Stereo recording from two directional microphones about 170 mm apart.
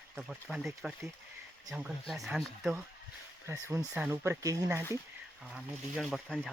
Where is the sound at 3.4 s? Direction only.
15° right (ahead or behind).